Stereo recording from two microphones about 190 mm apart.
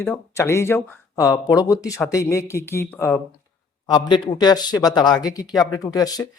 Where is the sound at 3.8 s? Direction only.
20° left (ahead or behind).